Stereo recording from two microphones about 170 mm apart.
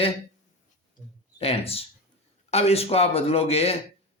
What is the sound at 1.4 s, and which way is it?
Speech, 35° left (ahead or behind).